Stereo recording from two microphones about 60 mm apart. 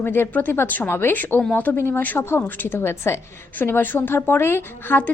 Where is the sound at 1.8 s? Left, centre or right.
Left.